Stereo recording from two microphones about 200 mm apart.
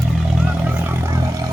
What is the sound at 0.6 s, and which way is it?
Vehicle, 10° right (ahead or behind).